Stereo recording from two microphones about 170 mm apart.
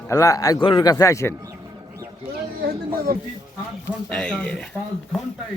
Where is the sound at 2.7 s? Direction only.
60° right (ahead or behind).